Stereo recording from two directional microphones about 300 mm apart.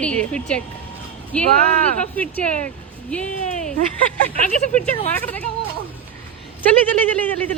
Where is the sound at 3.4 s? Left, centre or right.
Left.